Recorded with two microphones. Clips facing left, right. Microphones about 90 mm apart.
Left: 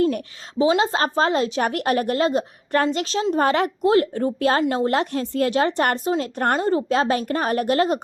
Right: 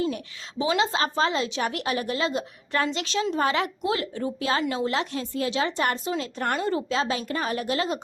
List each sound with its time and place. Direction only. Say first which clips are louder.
0.6 s a woman's voice: left 5 dB; 35° left (ahead or behind); by 6.0 s 55° left (ahead or behind)
6.1 s speech: left 6 dB; 40° left (ahead or behind)
6.8 s a woman's voice: left 6 dB; 50° left (ahead or behind)